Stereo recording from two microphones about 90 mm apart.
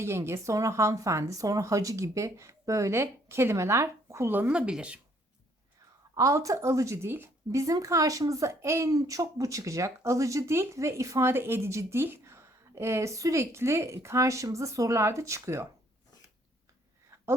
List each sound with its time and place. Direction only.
0.0 s speech: 30° right (ahead or behind); by 4.9 s 15° right (ahead or behind)
6.1 s speech: 35° right (ahead or behind)